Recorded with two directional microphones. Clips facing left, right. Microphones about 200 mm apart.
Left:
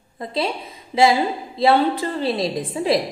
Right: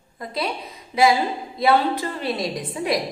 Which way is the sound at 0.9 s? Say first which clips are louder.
Left 2 dB; 30° left (ahead or behind).